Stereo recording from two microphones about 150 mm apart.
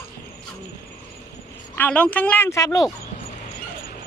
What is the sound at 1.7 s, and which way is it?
Speech, 10° left (ahead or behind).